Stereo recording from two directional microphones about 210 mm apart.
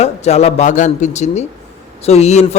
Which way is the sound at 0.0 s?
30° left (ahead or behind).